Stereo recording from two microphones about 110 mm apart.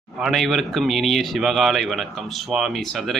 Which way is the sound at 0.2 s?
Centre (ahead or behind).